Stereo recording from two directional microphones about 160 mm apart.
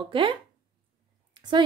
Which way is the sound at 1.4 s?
30° right (ahead or behind).